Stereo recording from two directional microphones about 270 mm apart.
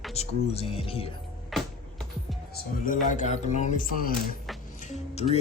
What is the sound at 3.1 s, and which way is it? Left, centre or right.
Speech, left.